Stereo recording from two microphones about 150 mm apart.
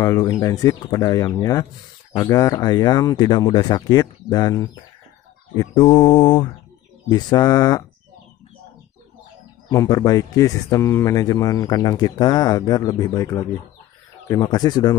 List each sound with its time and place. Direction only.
0.0 s speech: 25° left (ahead or behind)
9.7 s speech: 25° left (ahead or behind)